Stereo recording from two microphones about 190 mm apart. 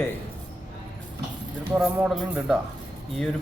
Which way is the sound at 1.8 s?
Centre (ahead or behind).